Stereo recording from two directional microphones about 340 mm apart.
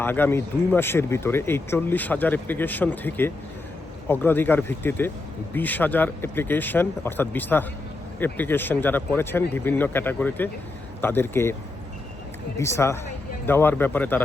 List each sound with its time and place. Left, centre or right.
0.0 s speech: centre
12.5 s speech: centre